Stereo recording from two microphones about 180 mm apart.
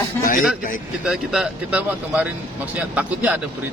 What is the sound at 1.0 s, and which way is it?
A man's voice, centre (ahead or behind).